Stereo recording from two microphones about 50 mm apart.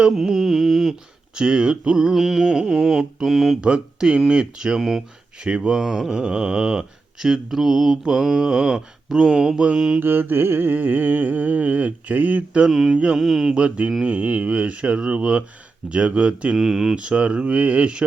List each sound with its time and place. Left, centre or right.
0.2 s speech: centre; by 2.0 s right
2.0 s speech: centre
3.6 s speech: centre
5.4 s speech: centre
5.8 s speech: centre
10.0 s a sound: right
12.6 s speech: centre
12.9 s speech: right
13.1 s speech: centre
13.6 s speech: right
16.6 s speech: centre
17.0 s speech: right